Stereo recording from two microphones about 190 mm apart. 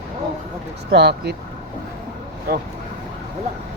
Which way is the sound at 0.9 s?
60° right (ahead or behind).